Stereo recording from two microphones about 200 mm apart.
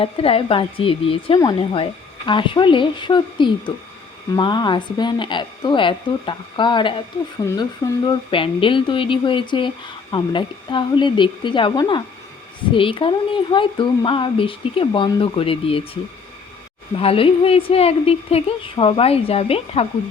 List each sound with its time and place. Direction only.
0.0 s speech: 30° left (ahead or behind)
17.0 s speech: 30° left (ahead or behind)